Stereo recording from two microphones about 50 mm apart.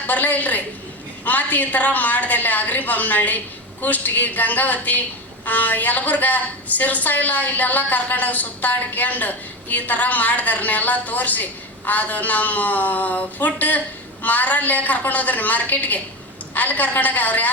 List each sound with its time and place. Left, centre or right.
0.1 s a woman's voice: left